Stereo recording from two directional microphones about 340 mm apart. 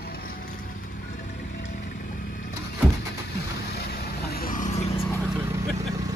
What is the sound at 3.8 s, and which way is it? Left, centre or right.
Vehicle, left.